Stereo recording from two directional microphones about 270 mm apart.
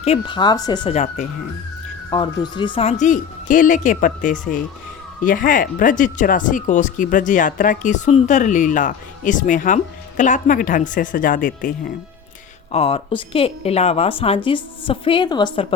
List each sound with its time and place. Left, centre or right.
0.0 s speech: centre
2.0 s speech: centre
12.7 s speech: left